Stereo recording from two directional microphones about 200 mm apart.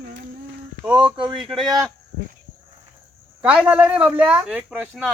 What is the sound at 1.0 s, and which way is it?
Speech, 25° right (ahead or behind).